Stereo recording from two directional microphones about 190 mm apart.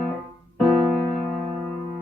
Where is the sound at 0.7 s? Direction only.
25° right (ahead or behind).